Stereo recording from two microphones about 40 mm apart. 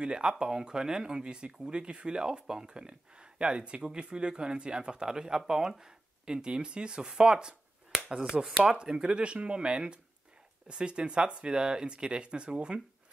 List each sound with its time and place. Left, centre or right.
0.0 s speech: right
8.2 s speech: centre
8.8 s speech: right